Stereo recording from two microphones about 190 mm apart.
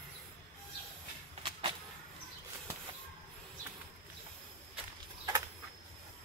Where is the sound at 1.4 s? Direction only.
25° right (ahead or behind).